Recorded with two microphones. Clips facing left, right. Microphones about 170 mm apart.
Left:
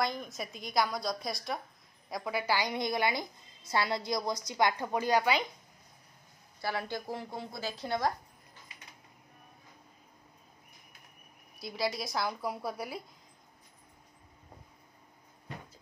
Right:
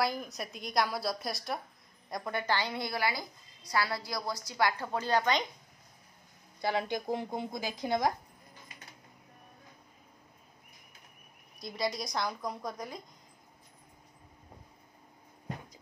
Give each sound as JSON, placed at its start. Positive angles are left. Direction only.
{"t": 0.0, "sound": "a woman's voice", "side_deg": -5}
{"t": 6.6, "sound": "a woman's voice", "side_deg": -20}
{"t": 11.6, "sound": "a woman's voice", "side_deg": 5}